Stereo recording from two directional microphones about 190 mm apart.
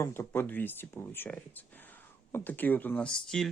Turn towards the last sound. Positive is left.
turn(degrees=0)  # may be behind; listen again after turning